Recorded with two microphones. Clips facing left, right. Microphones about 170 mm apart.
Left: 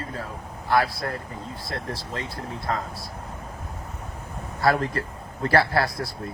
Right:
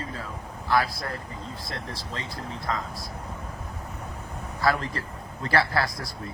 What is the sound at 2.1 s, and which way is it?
Speech, 60° left (ahead or behind).